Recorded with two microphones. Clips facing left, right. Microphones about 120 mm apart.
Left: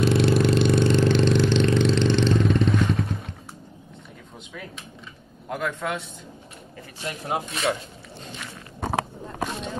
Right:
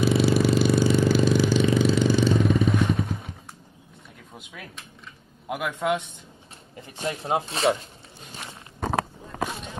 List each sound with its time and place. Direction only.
0.0 s vehicle: centre (ahead or behind)
5.5 s a sound: 15° right (ahead or behind)
7.0 s speech: 30° right (ahead or behind)